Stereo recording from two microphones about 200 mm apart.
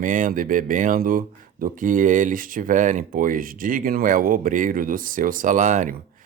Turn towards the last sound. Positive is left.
turn(degrees=-40)  # may be behind; listen again after turning